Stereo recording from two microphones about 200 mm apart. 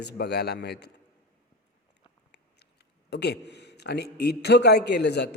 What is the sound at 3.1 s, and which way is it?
A man's voice, 55° left (ahead or behind).